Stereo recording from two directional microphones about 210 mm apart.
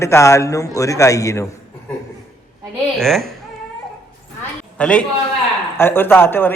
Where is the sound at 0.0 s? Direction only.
15° left (ahead or behind).